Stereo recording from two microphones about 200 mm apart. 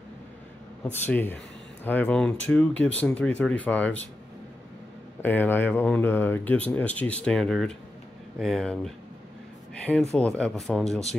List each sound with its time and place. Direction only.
0.9 s speech: 10° left (ahead or behind)
5.2 s speech: 10° left (ahead or behind)
10.1 s speech: 5° left (ahead or behind)